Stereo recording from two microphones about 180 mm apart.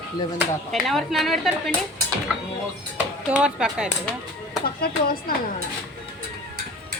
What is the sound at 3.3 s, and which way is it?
Speech, 5° right (ahead or behind).